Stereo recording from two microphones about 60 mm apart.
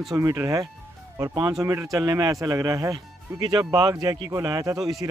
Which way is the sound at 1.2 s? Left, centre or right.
Right.